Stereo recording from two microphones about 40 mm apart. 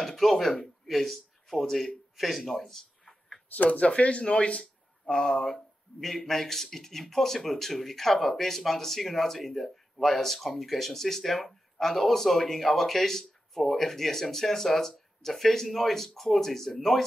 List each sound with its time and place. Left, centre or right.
0.0 s speech: centre
2.1 s a sound: centre
3.4 s speech: left; by 17.0 s centre